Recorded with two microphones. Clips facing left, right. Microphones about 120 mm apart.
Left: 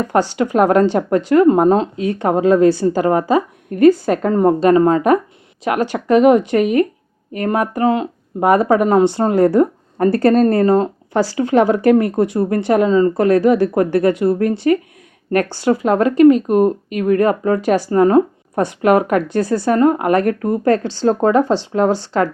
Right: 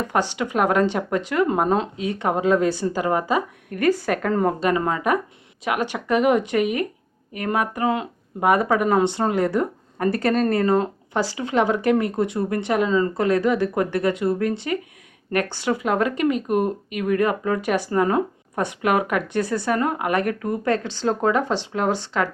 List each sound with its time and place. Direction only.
0.1 s speech: 35° left (ahead or behind)
4.6 s speech: 40° left (ahead or behind)